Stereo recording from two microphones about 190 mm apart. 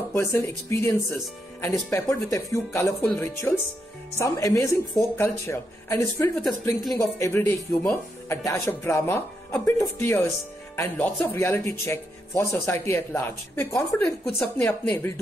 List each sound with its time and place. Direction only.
0.1 s speech: 15° left (ahead or behind)
6.3 s speech: centre (ahead or behind)
6.9 s speech: 15° left (ahead or behind)